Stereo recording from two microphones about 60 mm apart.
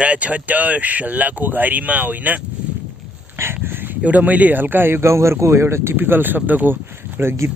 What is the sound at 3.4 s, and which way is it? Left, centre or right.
A man's voice, right.